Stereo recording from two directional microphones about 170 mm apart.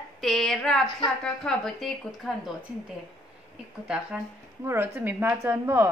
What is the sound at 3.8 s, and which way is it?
A woman's voice, 5° right (ahead or behind).